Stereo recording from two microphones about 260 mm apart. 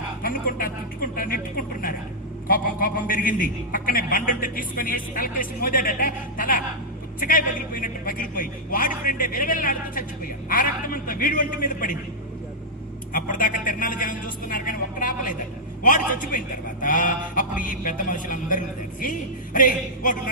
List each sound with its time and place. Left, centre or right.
0.2 s speech: left
1.1 s a sound: left
2.5 s a man's voice: left
13.1 s a man's voice: left